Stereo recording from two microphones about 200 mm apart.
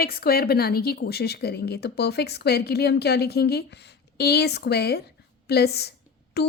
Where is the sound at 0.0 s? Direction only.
50° left (ahead or behind).